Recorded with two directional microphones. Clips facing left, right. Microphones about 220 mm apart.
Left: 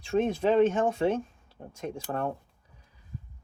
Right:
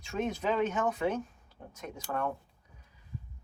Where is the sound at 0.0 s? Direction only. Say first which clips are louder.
Left 7 dB; 35° left (ahead or behind).